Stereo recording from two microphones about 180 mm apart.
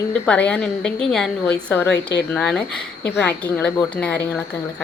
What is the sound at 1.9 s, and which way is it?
Speech, 70° left (ahead or behind).